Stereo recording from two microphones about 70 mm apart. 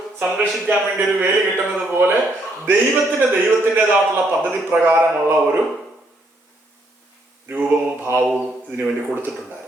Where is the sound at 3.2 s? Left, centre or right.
Right.